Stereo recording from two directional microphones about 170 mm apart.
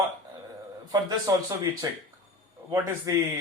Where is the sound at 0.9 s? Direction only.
20° right (ahead or behind).